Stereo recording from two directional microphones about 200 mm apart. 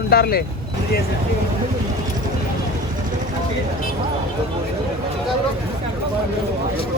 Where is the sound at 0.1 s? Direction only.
50° left (ahead or behind).